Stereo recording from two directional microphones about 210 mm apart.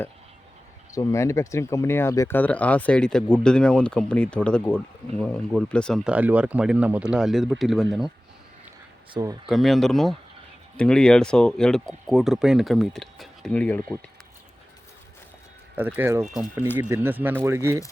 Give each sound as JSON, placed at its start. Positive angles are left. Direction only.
{"t": 0.9, "sound": "speech", "side_deg": 15}
{"t": 9.2, "sound": "speech", "side_deg": -15}
{"t": 9.5, "sound": "speech", "side_deg": 0}
{"t": 15.7, "sound": "speech", "side_deg": -5}